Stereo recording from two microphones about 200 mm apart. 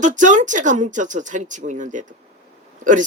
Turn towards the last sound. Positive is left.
turn(degrees=-40)  # may be behind; listen again after turning